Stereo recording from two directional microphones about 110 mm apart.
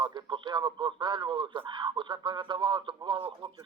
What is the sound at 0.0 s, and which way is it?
Speech, 45° right (ahead or behind).